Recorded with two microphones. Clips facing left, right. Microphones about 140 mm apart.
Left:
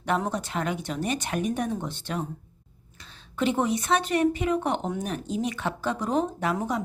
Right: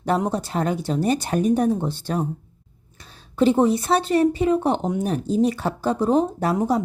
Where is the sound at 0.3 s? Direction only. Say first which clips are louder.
Right 5 dB; 35° right (ahead or behind).